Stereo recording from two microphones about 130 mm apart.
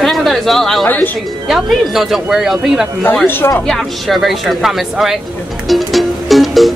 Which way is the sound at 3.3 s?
15° left (ahead or behind).